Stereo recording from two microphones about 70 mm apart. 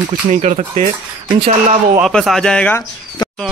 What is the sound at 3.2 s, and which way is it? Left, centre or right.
Bird, left.